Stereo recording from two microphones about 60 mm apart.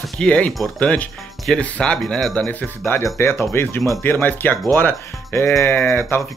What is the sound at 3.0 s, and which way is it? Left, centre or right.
Speech, left.